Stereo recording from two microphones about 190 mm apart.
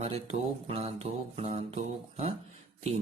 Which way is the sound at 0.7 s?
35° right (ahead or behind).